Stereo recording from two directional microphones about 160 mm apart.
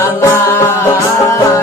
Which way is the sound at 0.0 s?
15° left (ahead or behind).